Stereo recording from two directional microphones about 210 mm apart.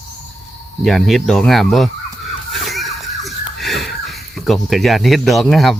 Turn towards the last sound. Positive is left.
turn(degrees=0)  # may be behind; listen again after turning